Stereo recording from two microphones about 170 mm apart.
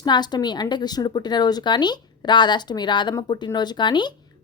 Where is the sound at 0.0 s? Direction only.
25° left (ahead or behind).